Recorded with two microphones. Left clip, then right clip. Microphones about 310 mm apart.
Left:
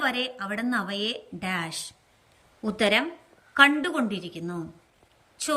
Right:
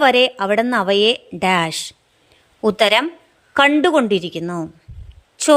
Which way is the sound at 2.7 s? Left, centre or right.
Centre.